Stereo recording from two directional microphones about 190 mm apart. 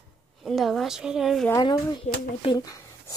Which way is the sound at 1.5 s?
20° left (ahead or behind).